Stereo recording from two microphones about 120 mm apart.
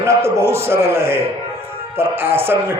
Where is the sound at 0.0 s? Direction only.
25° right (ahead or behind).